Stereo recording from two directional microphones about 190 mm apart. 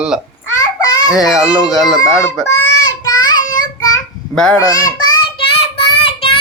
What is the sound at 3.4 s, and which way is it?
Child singing, 45° left (ahead or behind).